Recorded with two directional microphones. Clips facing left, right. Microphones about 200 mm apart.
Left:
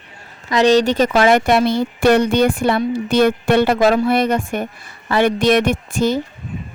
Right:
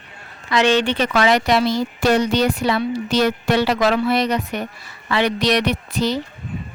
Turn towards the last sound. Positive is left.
turn(degrees=50)  # may be behind; listen again after turning